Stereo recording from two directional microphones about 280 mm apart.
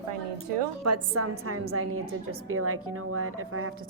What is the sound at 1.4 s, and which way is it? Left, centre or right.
A woman's voice, right.